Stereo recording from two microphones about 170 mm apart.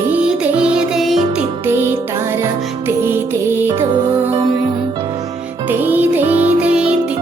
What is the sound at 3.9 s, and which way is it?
Music, 25° right (ahead or behind).